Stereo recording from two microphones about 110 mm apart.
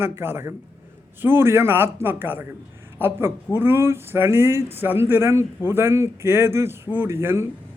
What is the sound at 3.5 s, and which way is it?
A man's voice, 20° right (ahead or behind).